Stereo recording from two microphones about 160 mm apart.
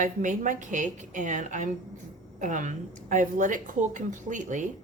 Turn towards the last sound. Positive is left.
turn(degrees=-50)  # may be behind; listen again after turning